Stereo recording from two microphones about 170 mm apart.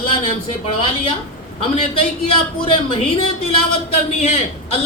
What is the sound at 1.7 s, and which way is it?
Speech, 35° left (ahead or behind).